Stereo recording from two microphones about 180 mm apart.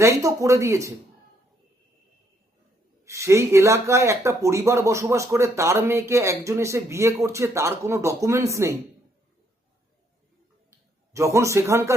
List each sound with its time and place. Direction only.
0.0 s speech: 15° right (ahead or behind)
3.0 s speech: 15° right (ahead or behind)
10.7 s speech: 15° right (ahead or behind)